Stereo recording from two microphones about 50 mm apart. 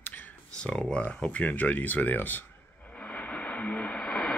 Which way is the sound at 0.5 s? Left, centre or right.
Left.